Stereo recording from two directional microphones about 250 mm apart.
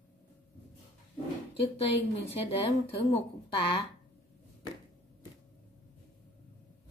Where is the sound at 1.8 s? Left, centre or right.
Left.